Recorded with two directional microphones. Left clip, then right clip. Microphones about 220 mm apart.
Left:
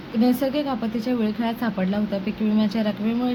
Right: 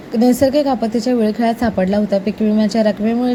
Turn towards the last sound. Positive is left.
turn(degrees=-25)  # may be behind; listen again after turning